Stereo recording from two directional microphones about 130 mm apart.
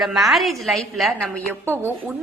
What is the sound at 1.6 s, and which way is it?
Speech, 15° right (ahead or behind).